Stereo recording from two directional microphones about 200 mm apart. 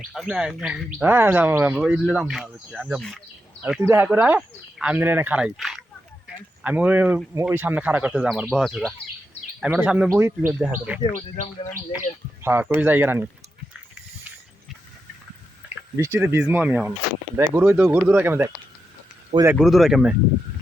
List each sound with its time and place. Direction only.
0.1 s speech: centre (ahead or behind)
12.4 s speech: 10° right (ahead or behind)
15.7 s speech: 10° right (ahead or behind)
19.3 s speech: 35° right (ahead or behind)
19.6 s speech: centre (ahead or behind)